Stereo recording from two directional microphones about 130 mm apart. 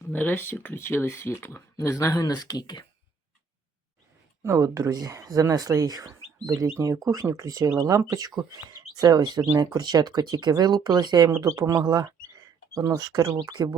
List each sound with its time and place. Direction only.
0.1 s speech: 15° left (ahead or behind); by 2.8 s 30° left (ahead or behind)
4.4 s speech: 25° right (ahead or behind)
9.4 s speech: 20° right (ahead or behind)